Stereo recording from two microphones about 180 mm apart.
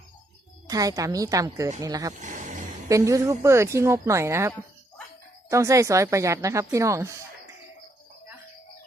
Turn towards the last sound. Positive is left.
turn(degrees=-15)  # may be behind; listen again after turning